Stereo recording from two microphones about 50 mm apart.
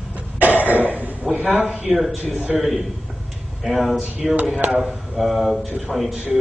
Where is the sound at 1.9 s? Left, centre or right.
Centre.